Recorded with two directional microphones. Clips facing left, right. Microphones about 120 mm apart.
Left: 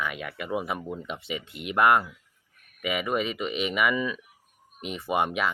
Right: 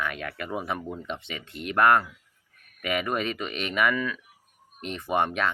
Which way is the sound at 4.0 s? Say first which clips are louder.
Left 1 dB; 15° left (ahead or behind).